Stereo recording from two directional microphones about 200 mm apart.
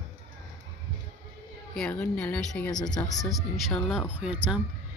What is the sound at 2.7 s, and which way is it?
Speech, 20° left (ahead or behind).